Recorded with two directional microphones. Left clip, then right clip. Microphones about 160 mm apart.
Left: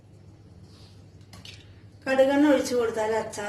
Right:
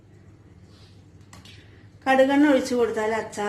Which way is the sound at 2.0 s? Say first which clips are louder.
Right 3 dB; 55° right (ahead or behind).